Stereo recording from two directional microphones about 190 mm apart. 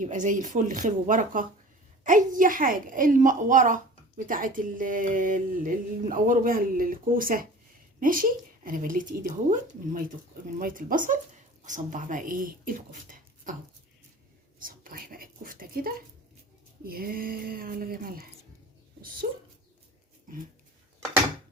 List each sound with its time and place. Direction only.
0.0 s speech: 40° right (ahead or behind)
14.6 s whispering: 45° right (ahead or behind)
16.8 s speech: 50° right (ahead or behind)